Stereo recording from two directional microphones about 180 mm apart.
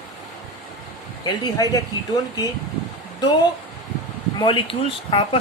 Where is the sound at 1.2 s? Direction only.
20° left (ahead or behind).